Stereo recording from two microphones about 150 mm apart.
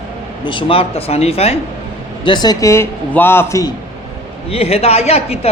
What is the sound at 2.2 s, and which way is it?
A man's voice, 30° left (ahead or behind).